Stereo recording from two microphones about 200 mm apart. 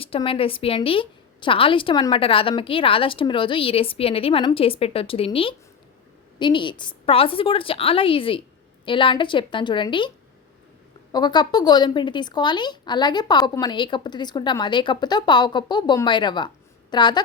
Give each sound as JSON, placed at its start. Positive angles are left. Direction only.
{"t": 0.0, "sound": "a woman's voice", "side_deg": 25}
{"t": 11.1, "sound": "a woman's voice", "side_deg": 20}